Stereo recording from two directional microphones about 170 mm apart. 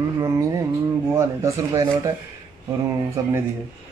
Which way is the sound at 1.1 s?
20° right (ahead or behind).